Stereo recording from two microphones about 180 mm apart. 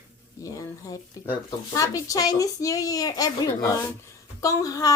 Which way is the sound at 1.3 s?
20° left (ahead or behind).